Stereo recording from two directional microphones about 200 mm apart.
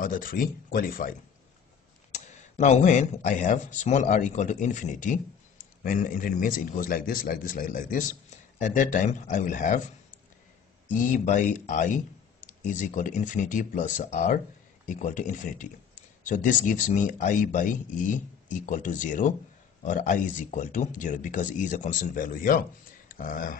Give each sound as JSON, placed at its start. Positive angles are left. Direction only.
{"t": 0.0, "sound": "speech", "side_deg": 45}
{"t": 2.1, "sound": "speech", "side_deg": 35}